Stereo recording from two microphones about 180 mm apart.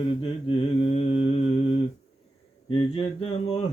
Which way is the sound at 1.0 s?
35° left (ahead or behind).